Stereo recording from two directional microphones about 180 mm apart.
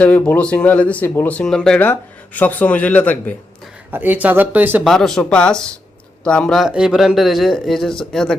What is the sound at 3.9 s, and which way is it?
Speech, 10° right (ahead or behind).